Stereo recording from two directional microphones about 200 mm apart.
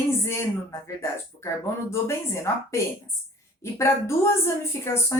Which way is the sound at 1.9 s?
15° left (ahead or behind).